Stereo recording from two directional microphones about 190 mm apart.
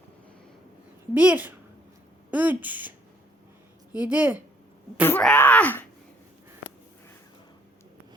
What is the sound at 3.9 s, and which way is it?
Speech, 10° right (ahead or behind).